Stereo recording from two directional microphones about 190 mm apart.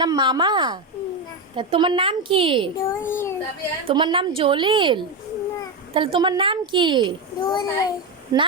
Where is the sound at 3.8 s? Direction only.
25° right (ahead or behind).